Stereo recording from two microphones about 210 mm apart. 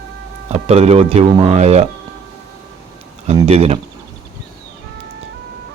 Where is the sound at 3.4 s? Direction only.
30° right (ahead or behind).